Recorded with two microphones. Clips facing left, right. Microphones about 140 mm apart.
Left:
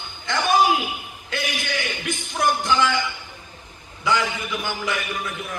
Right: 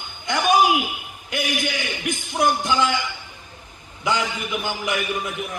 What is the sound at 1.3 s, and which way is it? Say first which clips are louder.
Music: right 3 dB; 15° right (ahead or behind).